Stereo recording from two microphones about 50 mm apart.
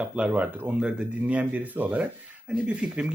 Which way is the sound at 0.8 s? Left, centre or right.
Centre.